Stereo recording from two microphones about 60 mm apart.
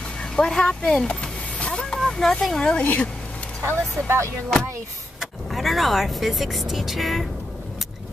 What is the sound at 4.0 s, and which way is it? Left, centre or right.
Speech, right.